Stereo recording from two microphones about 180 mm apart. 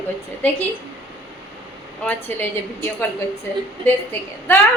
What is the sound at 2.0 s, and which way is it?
Speech, 10° left (ahead or behind).